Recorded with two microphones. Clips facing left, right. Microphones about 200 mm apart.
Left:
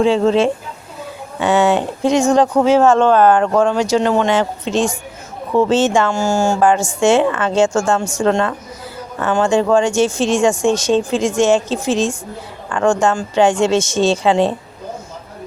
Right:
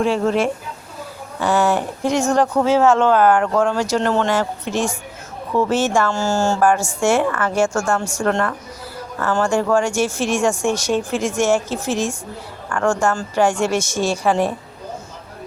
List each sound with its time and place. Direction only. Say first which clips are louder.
0.0 s speech: left 5 dB; 25° left (ahead or behind)